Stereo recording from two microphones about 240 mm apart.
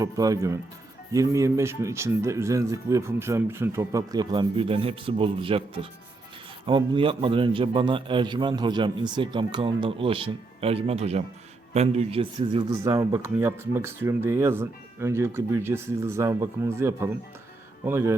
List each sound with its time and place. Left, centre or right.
0.0 s a man's voice: centre